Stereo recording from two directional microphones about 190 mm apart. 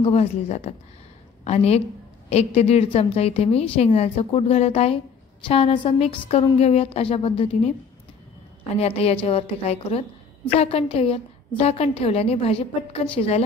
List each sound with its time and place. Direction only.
0.0 s a woman's voice: 30° left (ahead or behind)
8.7 s a woman's voice: 30° left (ahead or behind)